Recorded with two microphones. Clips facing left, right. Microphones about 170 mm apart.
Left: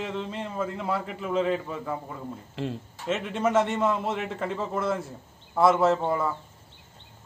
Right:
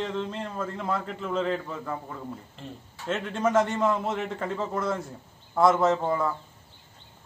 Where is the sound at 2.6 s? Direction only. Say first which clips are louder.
Left 10 dB; 80° left.